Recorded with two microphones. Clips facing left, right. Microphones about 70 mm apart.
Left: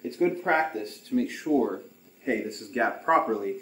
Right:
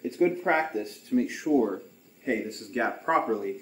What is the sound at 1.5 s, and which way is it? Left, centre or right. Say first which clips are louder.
Speech: even; centre.